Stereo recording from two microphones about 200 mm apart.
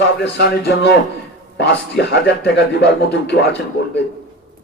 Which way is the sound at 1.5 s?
55° left (ahead or behind).